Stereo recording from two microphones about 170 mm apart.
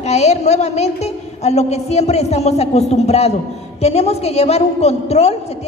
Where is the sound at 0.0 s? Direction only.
40° left (ahead or behind).